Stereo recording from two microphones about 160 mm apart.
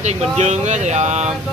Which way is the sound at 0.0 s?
45° right (ahead or behind).